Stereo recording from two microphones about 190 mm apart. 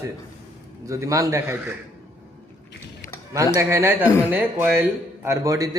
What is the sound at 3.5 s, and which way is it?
A man's voice, 15° right (ahead or behind).